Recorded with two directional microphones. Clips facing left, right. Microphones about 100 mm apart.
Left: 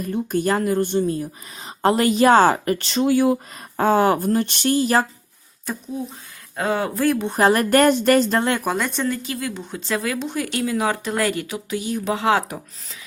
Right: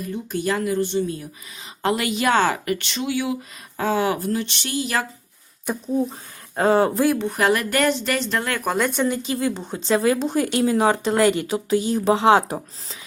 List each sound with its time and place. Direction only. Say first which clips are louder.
0.0 s a woman's voice: left 4 dB; 50° left (ahead or behind)
6.6 s speech: right 5 dB; 35° right (ahead or behind)
7.3 s speech: left 3 dB; 35° left (ahead or behind)
8.4 s speech: left 5 dB; 25° left (ahead or behind)
8.6 s speech: right 1 dB; centre (ahead or behind)
9.0 s a woman's voice: right 2 dB; 20° right (ahead or behind)